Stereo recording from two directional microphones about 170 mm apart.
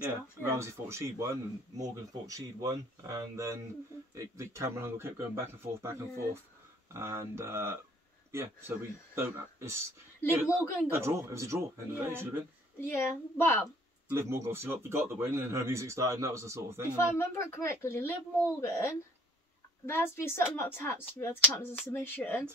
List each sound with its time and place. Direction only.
0.4 s a man's voice: 15° right (ahead or behind)
12.8 s speech: 10° left (ahead or behind)
14.0 s a man's voice: 15° right (ahead or behind)
16.9 s speech: 15° left (ahead or behind)